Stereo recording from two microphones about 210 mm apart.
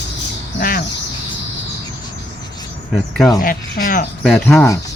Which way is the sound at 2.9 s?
Centre (ahead or behind).